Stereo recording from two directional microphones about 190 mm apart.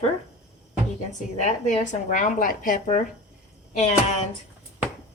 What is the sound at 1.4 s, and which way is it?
Speech, 40° left (ahead or behind).